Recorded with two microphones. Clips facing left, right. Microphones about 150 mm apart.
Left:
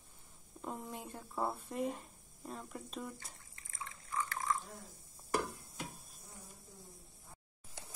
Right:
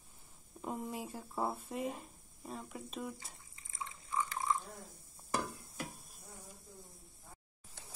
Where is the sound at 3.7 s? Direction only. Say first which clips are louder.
Right 2 dB; 20° right (ahead or behind).